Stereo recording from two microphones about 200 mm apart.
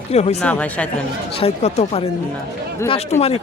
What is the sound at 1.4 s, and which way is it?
Speech, 30° left (ahead or behind).